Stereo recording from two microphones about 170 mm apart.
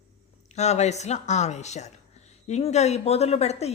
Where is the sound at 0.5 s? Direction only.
40° left (ahead or behind).